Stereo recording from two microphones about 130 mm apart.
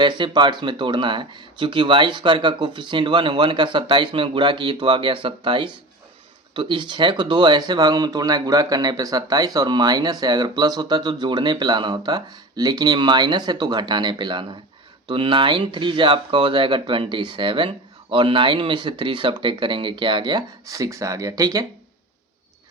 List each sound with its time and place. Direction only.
0.0 s speech: 35° right (ahead or behind)